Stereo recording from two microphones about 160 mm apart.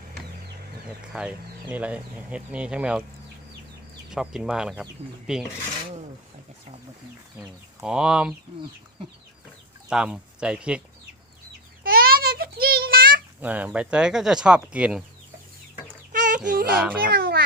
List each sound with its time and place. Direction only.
1.1 s speech: 5° right (ahead or behind)
4.1 s speech: 5° right (ahead or behind)
7.8 s speech: 5° right (ahead or behind)
9.9 s speech: 5° right (ahead or behind)
11.8 s a sound: 65° right (ahead or behind)
13.4 s speech: 10° right (ahead or behind)
16.1 s a sound: 55° right (ahead or behind)
16.7 s speech: 5° right (ahead or behind)
17.1 s speech: 75° right (ahead or behind)